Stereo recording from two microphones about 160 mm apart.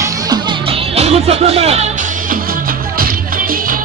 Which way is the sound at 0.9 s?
40° right (ahead or behind).